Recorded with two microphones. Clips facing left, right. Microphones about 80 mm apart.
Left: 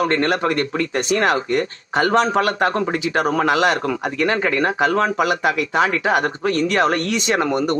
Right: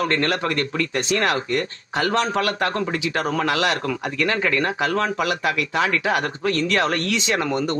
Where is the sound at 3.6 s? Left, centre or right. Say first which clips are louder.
Left 4 dB; centre.